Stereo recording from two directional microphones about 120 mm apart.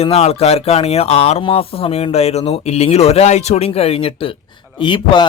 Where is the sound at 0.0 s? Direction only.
60° left (ahead or behind).